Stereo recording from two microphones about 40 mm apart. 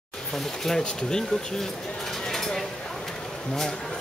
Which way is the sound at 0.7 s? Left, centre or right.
Centre.